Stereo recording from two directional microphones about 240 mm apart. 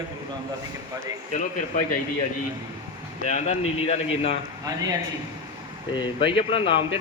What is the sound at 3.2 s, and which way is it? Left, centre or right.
A man's voice, left.